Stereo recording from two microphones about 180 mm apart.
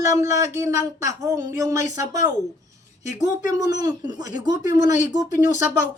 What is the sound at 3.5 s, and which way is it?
Speech, 20° right (ahead or behind).